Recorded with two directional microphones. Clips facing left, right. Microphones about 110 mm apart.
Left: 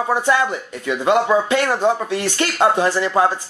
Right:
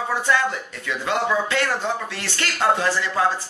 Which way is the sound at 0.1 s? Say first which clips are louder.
Left 4 dB; 20° left (ahead or behind).